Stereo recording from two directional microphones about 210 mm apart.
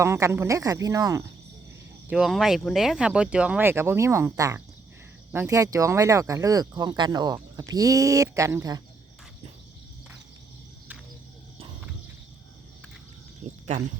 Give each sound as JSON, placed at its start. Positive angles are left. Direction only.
{"t": 0.0, "sound": "speech", "side_deg": -15}
{"t": 2.0, "sound": "speech", "side_deg": 0}
{"t": 13.4, "sound": "cricket", "side_deg": -30}